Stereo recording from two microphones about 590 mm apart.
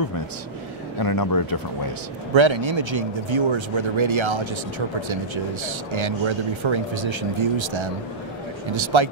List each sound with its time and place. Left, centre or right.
0.9 s speech: left
2.3 s speech: right